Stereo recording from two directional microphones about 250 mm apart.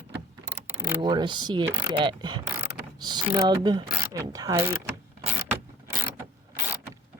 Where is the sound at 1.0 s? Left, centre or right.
Centre.